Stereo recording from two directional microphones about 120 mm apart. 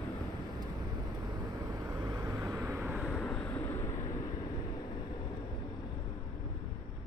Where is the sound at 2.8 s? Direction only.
5° right (ahead or behind); by 4.2 s 30° left (ahead or behind).